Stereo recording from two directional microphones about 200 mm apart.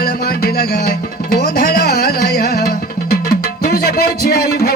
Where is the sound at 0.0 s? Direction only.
50° left (ahead or behind).